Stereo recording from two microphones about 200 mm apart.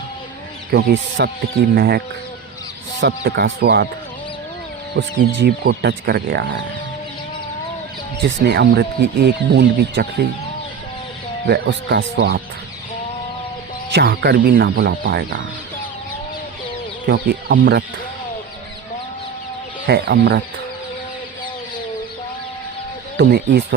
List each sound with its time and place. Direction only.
0.7 s speech: 65° right (ahead or behind)
1.7 s speech: 50° right (ahead or behind)
3.0 s speech: 55° right (ahead or behind)
4.9 s speech: 55° right (ahead or behind)
8.2 s speech: 55° right (ahead or behind)
11.4 s speech: 55° right (ahead or behind)
13.9 s speech: 55° right (ahead or behind)
17.1 s speech: 60° right (ahead or behind)
19.9 s speech: 55° right (ahead or behind)
23.1 s speech: 60° right (ahead or behind)